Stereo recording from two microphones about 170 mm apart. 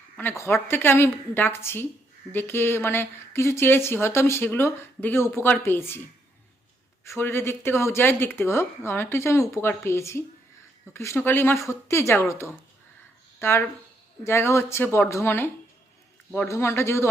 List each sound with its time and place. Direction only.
0.2 s speech: 15° left (ahead or behind)
7.0 s speech: 15° left (ahead or behind)